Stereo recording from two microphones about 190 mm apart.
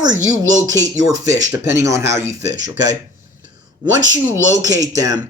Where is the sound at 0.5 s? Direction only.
20° right (ahead or behind).